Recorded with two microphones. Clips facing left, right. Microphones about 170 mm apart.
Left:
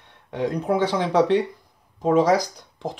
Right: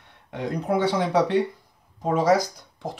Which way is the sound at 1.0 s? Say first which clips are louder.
Left 2 dB; 10° right (ahead or behind).